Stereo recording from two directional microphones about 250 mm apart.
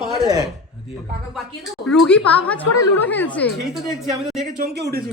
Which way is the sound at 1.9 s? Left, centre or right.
Centre.